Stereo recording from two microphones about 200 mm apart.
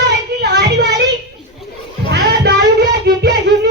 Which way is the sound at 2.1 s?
55° right (ahead or behind).